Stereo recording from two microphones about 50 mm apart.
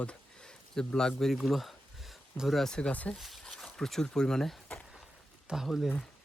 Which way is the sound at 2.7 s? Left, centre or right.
Centre.